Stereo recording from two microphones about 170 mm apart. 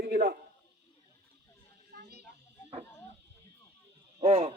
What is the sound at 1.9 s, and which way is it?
Children playing, 75° right (ahead or behind).